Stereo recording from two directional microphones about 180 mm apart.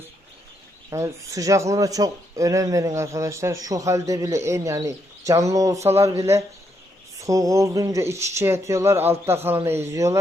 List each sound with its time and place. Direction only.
0.9 s speech: 15° right (ahead or behind)